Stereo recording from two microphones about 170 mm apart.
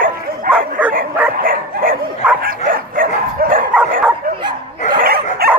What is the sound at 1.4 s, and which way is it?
Dog, 55° right (ahead or behind).